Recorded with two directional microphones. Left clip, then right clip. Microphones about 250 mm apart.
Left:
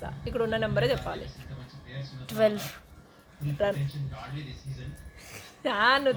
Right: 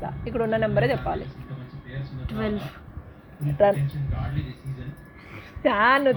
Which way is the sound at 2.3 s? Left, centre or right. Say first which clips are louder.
Left 5 dB; left.